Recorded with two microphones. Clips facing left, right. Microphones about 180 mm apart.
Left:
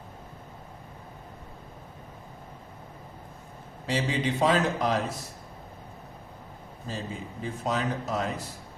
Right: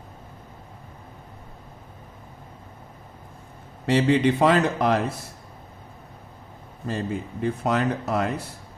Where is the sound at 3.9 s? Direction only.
60° right (ahead or behind).